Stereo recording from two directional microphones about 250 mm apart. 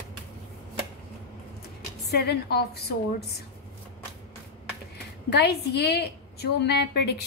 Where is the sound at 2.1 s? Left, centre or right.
Left.